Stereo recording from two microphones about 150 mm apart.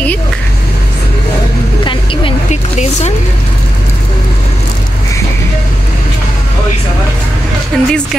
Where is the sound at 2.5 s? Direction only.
50° left (ahead or behind).